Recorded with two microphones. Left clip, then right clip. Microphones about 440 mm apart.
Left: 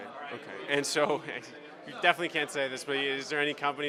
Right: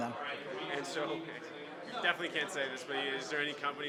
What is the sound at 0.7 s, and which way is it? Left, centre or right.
Speech, left.